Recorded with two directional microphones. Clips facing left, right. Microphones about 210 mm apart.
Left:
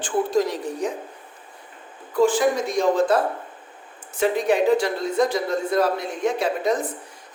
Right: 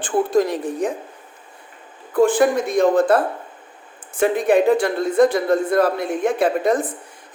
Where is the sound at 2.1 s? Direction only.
55° right (ahead or behind).